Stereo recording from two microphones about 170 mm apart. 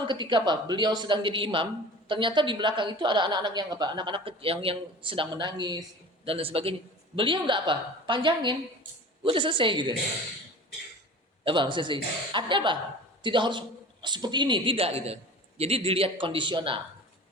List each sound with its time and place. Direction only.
0.1 s a woman's voice: 25° right (ahead or behind)
11.4 s a woman's voice: 30° right (ahead or behind)